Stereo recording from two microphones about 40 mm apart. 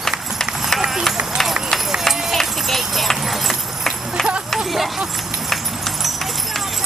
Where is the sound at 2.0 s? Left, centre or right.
Centre.